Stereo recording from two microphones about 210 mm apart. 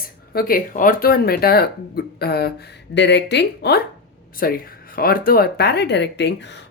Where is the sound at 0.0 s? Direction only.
45° left (ahead or behind).